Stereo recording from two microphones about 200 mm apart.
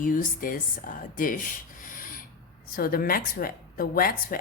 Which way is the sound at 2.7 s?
45° left (ahead or behind).